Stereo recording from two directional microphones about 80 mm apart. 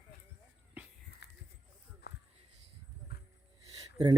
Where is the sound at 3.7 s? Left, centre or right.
Right.